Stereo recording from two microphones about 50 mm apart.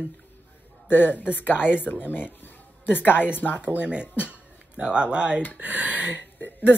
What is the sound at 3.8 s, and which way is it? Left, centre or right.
Speech, right.